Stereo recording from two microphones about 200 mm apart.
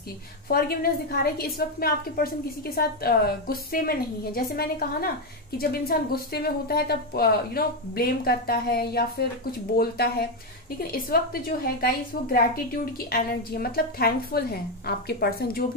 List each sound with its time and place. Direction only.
0.5 s a woman's voice: 50° left (ahead or behind)